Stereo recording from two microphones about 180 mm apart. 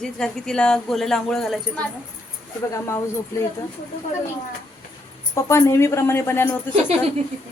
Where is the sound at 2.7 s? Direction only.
15° left (ahead or behind).